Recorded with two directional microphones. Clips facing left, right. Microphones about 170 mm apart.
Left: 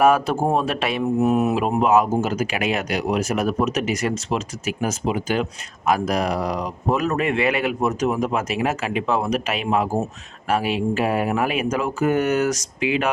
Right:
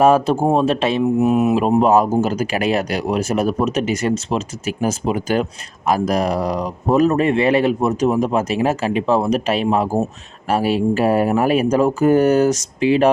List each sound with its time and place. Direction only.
0.0 s speech: 25° right (ahead or behind)
1.5 s speech: 35° right (ahead or behind)